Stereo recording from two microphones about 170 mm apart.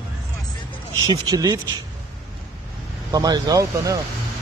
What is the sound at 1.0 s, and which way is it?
Speech, 20° right (ahead or behind).